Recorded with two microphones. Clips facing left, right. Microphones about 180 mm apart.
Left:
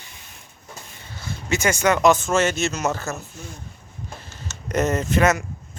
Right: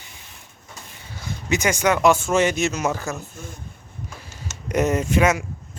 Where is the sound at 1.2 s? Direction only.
15° right (ahead or behind).